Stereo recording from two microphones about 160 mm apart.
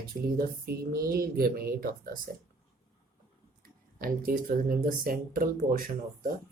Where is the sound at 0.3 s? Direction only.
70° right (ahead or behind).